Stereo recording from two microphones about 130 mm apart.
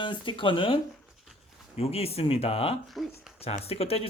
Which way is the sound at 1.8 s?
50° left (ahead or behind).